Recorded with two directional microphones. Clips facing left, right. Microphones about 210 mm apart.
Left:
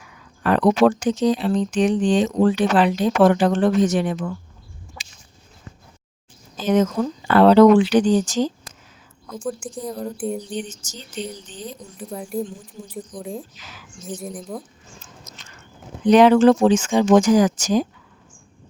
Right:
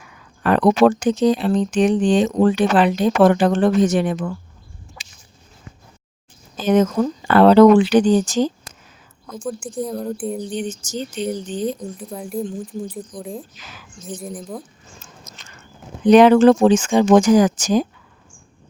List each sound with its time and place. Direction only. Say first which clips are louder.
0.4 s speech: right 2 dB; 55° right (ahead or behind)
6.6 s speech: right 3 dB; 55° right (ahead or behind)
9.4 s speech: right 3 dB; centre (ahead or behind)
10.5 s speech: right 5 dB; 55° right (ahead or behind)
11.9 s speech: even; centre (ahead or behind)
13.6 s speech: right 2 dB; 55° right (ahead or behind)
14.0 s speech: right 1 dB; centre (ahead or behind)
16.0 s speech: right 2 dB; 55° right (ahead or behind)